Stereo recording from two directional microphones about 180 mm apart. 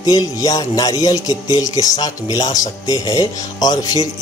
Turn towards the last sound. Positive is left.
turn(degrees=20)  # may be behind; listen again after turning